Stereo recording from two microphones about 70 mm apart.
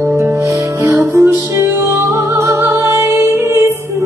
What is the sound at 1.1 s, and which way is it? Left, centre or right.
Music, right.